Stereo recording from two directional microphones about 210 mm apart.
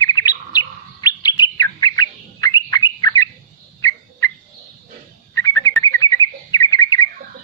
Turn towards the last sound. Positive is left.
turn(degrees=15)  # may be behind; listen again after turning